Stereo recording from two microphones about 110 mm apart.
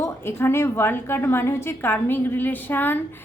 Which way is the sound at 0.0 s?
20° left (ahead or behind).